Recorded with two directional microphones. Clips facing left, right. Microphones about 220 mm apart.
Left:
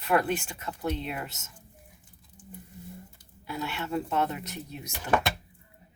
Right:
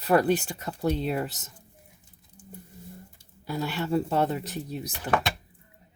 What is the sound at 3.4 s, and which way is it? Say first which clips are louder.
Speech: right 4 dB; 35° right (ahead or behind).